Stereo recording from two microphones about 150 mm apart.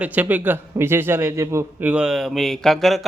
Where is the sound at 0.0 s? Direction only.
10° right (ahead or behind).